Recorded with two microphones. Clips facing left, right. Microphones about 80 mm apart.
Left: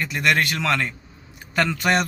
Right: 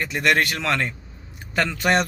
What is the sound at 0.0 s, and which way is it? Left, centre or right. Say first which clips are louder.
A man's voice: right 1 dB; right.